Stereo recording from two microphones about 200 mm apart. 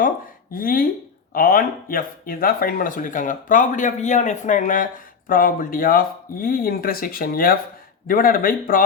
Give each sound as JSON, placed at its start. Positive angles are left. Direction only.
{"t": 0.5, "sound": "speech", "side_deg": 45}